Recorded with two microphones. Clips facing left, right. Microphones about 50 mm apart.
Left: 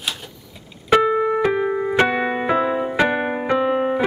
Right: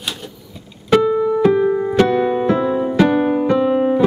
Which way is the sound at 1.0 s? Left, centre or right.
Left.